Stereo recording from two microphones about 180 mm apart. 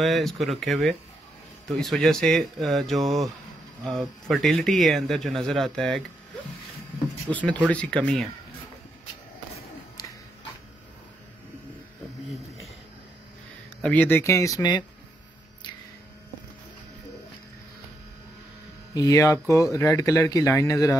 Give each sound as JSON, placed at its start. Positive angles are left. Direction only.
{"t": 0.0, "sound": "speech", "side_deg": 0}
{"t": 7.2, "sound": "speech", "side_deg": 5}
{"t": 13.8, "sound": "speech", "side_deg": 10}
{"t": 18.9, "sound": "speech", "side_deg": 20}